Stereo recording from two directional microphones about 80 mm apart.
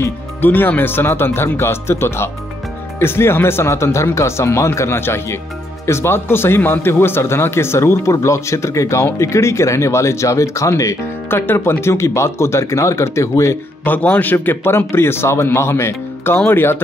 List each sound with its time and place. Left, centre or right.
0.0 s a man's voice: left
11.2 s a man's voice: left
13.8 s a man's voice: left